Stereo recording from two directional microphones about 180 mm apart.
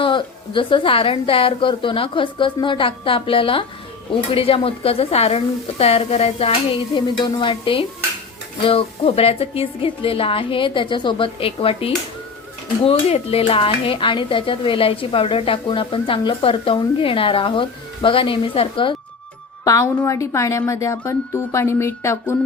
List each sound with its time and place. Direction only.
0.0 s speech: 25° left (ahead or behind)
19.6 s a woman's voice: 20° left (ahead or behind)